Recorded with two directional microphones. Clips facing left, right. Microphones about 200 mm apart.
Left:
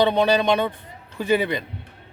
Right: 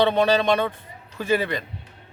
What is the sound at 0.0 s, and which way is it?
A man's voice, 10° left (ahead or behind).